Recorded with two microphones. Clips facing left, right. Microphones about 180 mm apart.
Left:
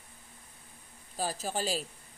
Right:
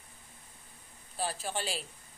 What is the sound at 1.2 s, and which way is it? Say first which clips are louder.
Speech: left 2 dB; 40° left (ahead or behind).